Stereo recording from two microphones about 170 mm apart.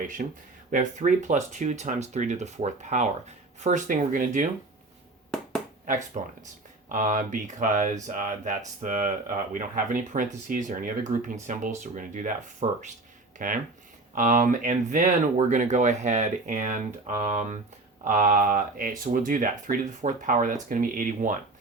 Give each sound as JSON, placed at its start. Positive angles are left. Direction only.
{"t": 0.2, "sound": "speech", "side_deg": -55}
{"t": 5.3, "sound": "a sound", "side_deg": 5}
{"t": 6.1, "sound": "speech", "side_deg": -40}
{"t": 6.8, "sound": "speech", "side_deg": -50}